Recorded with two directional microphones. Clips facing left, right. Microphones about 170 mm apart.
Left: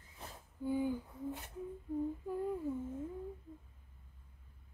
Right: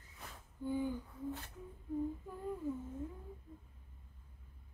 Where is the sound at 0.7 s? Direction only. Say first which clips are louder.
Left 2 dB; 10° left (ahead or behind).